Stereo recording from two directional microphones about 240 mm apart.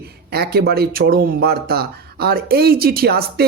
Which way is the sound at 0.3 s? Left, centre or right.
Right.